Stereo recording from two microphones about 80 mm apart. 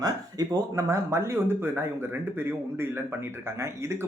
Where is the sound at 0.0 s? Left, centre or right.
Right.